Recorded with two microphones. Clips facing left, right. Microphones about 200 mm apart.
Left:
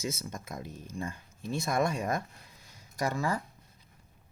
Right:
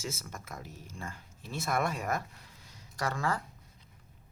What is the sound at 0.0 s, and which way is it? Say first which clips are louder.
Speech: left 4 dB; 15° left (ahead or behind).